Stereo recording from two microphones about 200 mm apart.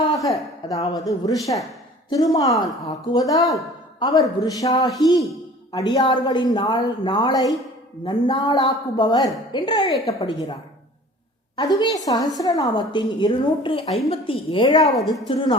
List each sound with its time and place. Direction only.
0.1 s a woman's voice: 15° left (ahead or behind)
3.3 s a woman's voice: centre (ahead or behind)
4.4 s speech: 20° left (ahead or behind)
11.5 s speech: 20° left (ahead or behind)